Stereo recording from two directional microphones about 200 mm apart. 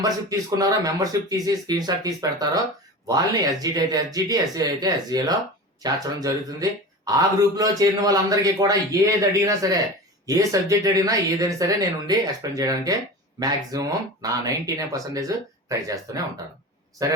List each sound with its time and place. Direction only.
0.0 s speech: 20° right (ahead or behind)